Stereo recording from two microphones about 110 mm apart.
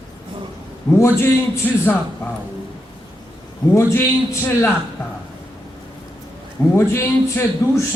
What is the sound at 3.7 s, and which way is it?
A man's voice, 25° left (ahead or behind).